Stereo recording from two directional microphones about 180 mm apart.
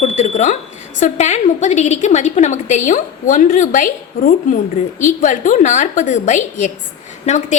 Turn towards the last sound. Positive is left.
turn(degrees=40)  # may be behind; listen again after turning